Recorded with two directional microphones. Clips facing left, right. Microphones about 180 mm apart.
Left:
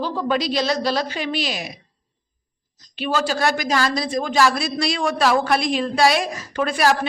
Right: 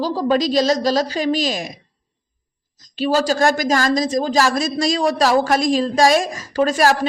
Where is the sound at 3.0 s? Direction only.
40° right (ahead or behind).